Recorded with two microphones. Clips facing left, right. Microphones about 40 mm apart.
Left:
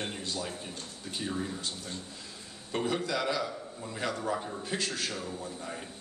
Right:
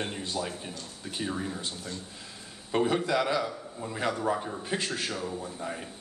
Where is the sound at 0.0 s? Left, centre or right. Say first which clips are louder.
Right 3 dB; centre.